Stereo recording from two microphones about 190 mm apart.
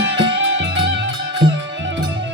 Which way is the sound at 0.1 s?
70° right (ahead or behind).